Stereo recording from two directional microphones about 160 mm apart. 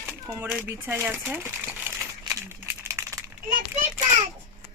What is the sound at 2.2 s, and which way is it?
Crumpling, 15° right (ahead or behind).